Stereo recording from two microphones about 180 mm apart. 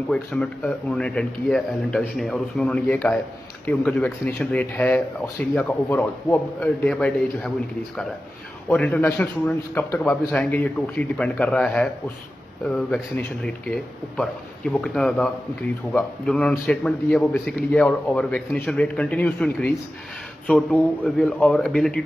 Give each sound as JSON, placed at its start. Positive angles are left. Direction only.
{"t": 0.1, "sound": "a man's voice", "side_deg": 5}
{"t": 8.6, "sound": "a man's voice", "side_deg": 5}